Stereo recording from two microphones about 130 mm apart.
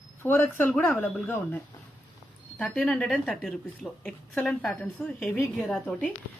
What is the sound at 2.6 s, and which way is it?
A woman's voice, 5° left (ahead or behind).